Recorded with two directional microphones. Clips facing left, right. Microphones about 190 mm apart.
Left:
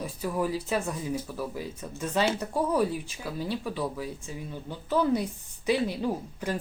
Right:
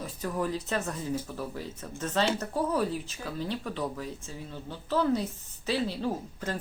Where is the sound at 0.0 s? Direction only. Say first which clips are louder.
Left 2 dB; 10° left (ahead or behind).